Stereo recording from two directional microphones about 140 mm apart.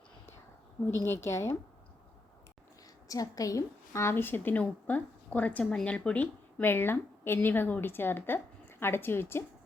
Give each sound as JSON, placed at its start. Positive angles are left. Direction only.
{"t": 0.9, "sound": "a woman's voice", "side_deg": 20}
{"t": 3.1, "sound": "a woman's voice", "side_deg": 25}